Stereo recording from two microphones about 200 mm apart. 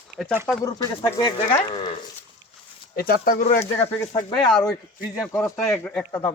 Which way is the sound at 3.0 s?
45° left (ahead or behind).